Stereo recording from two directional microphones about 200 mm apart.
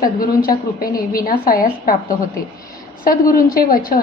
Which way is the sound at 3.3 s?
45° left (ahead or behind).